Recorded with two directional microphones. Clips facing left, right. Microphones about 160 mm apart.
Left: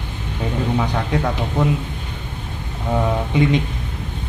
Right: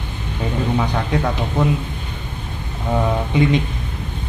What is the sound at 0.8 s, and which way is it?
Speech, 5° left (ahead or behind).